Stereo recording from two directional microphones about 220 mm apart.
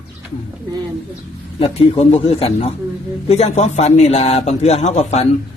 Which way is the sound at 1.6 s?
25° left (ahead or behind).